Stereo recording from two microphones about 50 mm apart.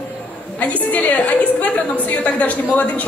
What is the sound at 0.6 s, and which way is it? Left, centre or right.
A woman's voice, left.